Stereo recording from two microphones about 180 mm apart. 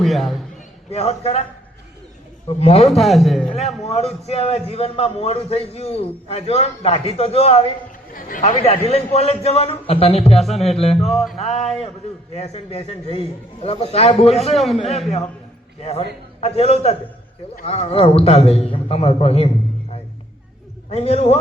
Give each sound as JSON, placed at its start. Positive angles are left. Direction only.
{"t": 0.0, "sound": "a man's voice", "side_deg": 0}
{"t": 0.9, "sound": "a man's voice", "side_deg": 35}
{"t": 2.5, "sound": "a man's voice", "side_deg": 35}
{"t": 2.9, "sound": "a man's voice", "side_deg": 0}
{"t": 3.8, "sound": "a man's voice", "side_deg": 35}
{"t": 8.1, "sound": "a man's voice", "side_deg": 50}
{"t": 10.3, "sound": "a man's voice", "side_deg": 0}
{"t": 10.6, "sound": "a man's voice", "side_deg": 35}
{"t": 11.1, "sound": "a man's voice", "side_deg": 0}
{"t": 11.3, "sound": "a man's voice", "side_deg": 35}
{"t": 14.5, "sound": "a man's voice", "side_deg": 0}
{"t": 15.8, "sound": "a man's voice", "side_deg": 35}
{"t": 20.9, "sound": "a man's voice", "side_deg": 35}